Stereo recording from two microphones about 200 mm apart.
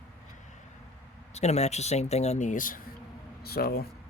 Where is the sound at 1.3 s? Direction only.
35° left (ahead or behind); by 3.9 s 50° left (ahead or behind).